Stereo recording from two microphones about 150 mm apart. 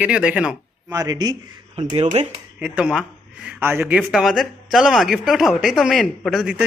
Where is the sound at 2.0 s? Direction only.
55° right (ahead or behind).